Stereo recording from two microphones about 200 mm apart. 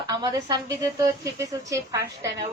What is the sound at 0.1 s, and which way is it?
Speech, 20° right (ahead or behind).